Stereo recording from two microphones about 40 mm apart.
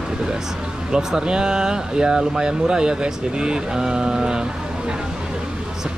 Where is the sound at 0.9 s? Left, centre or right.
Centre.